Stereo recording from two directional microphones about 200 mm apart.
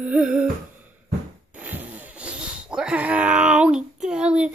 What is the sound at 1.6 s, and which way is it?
Wail, 10° right (ahead or behind).